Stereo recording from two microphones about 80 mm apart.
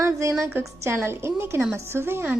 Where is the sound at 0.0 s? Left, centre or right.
Right.